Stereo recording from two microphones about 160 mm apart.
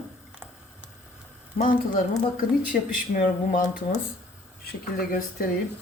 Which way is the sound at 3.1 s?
60° left (ahead or behind).